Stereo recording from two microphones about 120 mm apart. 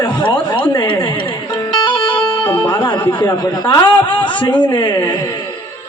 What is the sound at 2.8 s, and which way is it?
A man's voice, 35° left (ahead or behind).